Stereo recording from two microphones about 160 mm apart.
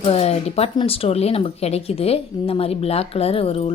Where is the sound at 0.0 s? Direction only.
40° left (ahead or behind).